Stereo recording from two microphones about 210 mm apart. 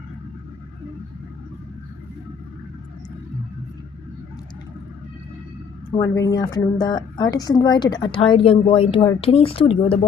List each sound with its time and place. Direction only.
6.0 s a woman's voice: 15° left (ahead or behind)